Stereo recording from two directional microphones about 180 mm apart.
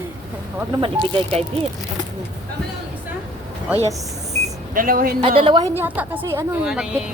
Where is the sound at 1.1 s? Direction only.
35° right (ahead or behind).